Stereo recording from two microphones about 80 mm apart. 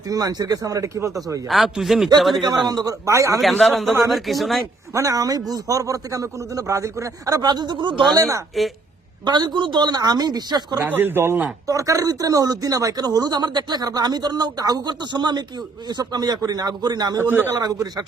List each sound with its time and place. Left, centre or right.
0.1 s a man's voice: right
1.5 s speech: centre
2.6 s speech: right
3.1 s a man's voice: right
3.6 s speech: centre
4.9 s a man's voice: right
8.1 s a man's voice: right
9.2 s speech: right
10.8 s speech: right
11.7 s speech: right
17.2 s speech: right
17.6 s a man's voice: right